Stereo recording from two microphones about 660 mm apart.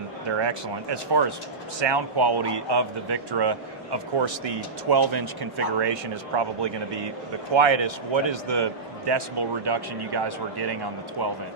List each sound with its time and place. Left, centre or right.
0.3 s speech: right